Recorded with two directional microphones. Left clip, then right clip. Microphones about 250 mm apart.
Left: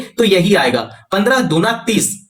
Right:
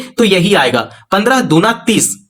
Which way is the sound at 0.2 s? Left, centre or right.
Right.